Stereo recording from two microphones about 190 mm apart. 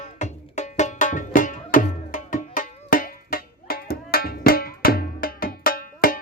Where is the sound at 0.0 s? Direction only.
40° left (ahead or behind).